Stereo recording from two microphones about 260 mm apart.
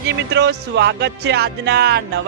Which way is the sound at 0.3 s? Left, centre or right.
Right.